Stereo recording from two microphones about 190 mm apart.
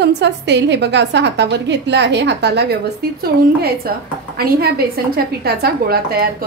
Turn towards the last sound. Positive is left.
turn(degrees=-55)  # may be behind; listen again after turning